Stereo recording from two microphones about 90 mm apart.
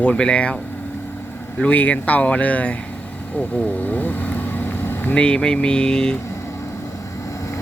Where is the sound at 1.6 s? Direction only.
15° left (ahead or behind).